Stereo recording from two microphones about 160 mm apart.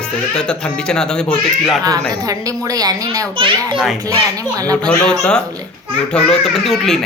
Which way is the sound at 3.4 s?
30° right (ahead or behind).